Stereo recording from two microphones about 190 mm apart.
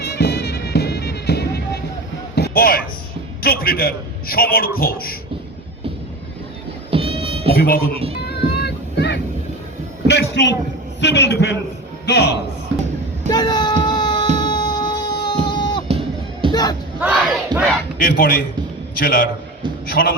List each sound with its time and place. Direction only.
0.0 s music: 55° left (ahead or behind)
2.3 s a sound: 55° left (ahead or behind)
3.4 s a man's voice: 50° left (ahead or behind)
6.9 s music: 30° right (ahead or behind)
7.5 s speech: 50° left (ahead or behind)
8.3 s boat: 60° left (ahead or behind)
10.1 s a man's voice: 65° left (ahead or behind)
13.3 s a sound: 20° left (ahead or behind)
15.9 s music: 30° right (ahead or behind)
16.5 s crowd: 20° left (ahead or behind)
17.0 s battle cry: 10° right (ahead or behind)
17.5 s battle cry: 25° right (ahead or behind)
18.0 s a man's voice: 50° left (ahead or behind)